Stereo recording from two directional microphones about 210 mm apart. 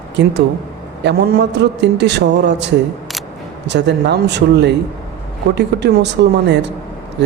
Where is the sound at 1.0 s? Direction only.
55° right (ahead or behind).